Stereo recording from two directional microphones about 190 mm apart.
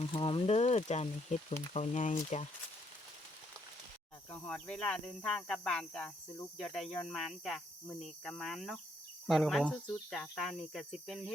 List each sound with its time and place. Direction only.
0.0 s speech: 25° left (ahead or behind)
4.3 s speech: 5° left (ahead or behind)